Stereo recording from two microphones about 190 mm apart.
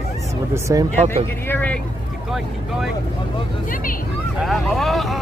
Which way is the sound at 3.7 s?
45° left (ahead or behind).